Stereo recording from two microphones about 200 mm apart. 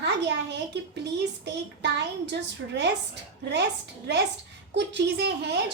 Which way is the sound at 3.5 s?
60° right (ahead or behind).